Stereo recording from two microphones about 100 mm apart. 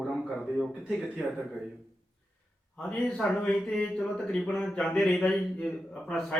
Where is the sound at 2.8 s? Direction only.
10° left (ahead or behind).